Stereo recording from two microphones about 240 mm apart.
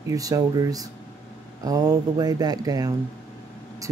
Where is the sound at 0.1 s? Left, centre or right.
Centre.